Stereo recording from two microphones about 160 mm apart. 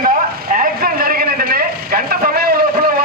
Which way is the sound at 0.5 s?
65° right (ahead or behind).